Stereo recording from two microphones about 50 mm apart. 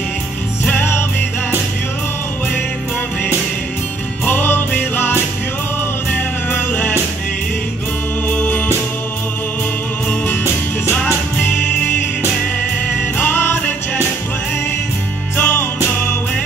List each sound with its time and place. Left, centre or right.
0.7 s music: left
4.3 s music: left
6.1 s music: left
8.3 s music: left
11.3 s music: left
13.2 s music: left
15.3 s music: left